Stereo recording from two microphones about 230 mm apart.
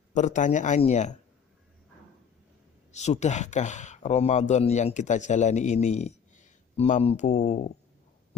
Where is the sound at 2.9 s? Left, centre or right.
Left.